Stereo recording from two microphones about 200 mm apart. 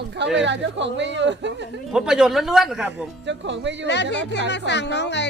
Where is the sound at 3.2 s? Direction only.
65° right (ahead or behind).